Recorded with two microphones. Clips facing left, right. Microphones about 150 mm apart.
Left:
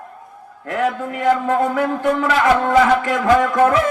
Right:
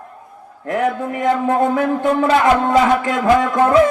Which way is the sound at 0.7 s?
20° right (ahead or behind).